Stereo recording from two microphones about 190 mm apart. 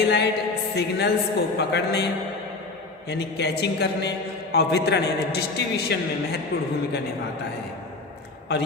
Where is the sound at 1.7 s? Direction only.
60° left (ahead or behind).